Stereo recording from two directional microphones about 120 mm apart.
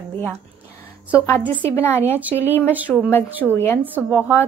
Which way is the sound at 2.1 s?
15° right (ahead or behind).